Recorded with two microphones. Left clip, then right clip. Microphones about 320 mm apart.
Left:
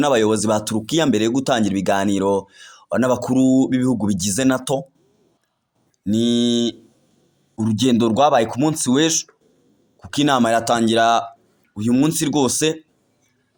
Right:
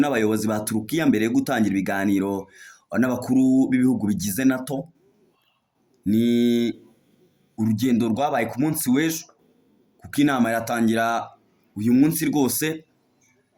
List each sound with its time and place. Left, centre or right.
0.0 s speech: left
6.1 s speech: centre